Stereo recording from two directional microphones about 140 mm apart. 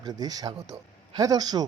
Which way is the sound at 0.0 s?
30° right (ahead or behind).